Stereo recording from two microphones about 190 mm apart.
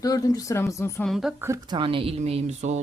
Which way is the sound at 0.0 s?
20° left (ahead or behind).